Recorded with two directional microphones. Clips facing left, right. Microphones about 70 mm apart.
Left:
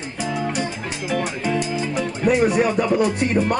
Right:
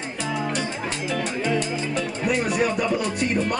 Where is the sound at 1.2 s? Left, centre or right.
Centre.